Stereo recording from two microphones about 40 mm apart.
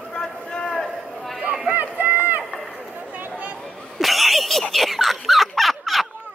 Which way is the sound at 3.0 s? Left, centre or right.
Right.